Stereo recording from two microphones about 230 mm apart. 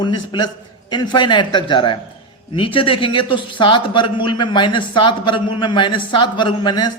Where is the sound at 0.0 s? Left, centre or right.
Centre.